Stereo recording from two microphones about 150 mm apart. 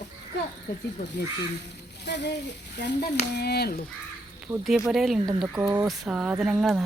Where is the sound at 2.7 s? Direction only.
90° left.